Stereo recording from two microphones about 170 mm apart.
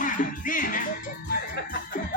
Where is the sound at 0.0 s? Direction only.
50° left (ahead or behind).